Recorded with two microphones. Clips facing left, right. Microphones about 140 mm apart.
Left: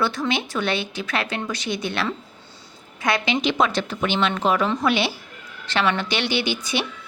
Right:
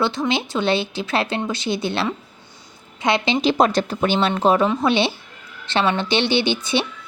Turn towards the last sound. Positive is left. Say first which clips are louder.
# right 4 dB
turn(degrees=-25)  # may be behind; listen again after turning